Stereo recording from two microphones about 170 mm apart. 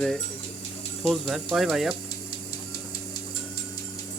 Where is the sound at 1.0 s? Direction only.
Centre (ahead or behind).